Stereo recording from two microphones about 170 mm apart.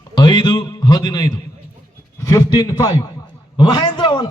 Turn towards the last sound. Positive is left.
turn(degrees=25)  # may be behind; listen again after turning